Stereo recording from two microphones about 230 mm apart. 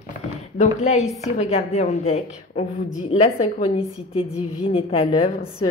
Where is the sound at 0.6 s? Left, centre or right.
Left.